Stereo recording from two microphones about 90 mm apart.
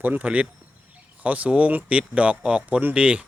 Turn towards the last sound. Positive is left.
turn(degrees=-15)  # may be behind; listen again after turning